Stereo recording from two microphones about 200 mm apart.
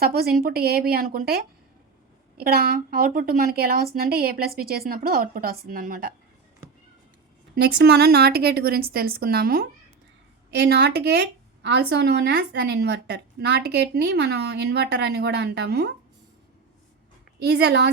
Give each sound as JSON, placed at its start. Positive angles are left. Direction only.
{"t": 0.0, "sound": "a woman's voice", "side_deg": -50}
{"t": 7.5, "sound": "a woman's voice", "side_deg": -55}
{"t": 17.4, "sound": "a woman's voice", "side_deg": -55}